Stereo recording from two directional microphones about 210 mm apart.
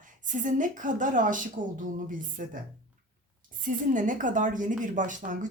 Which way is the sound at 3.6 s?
40° right (ahead or behind).